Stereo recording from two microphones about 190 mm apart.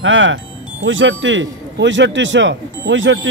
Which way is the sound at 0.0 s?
85° right.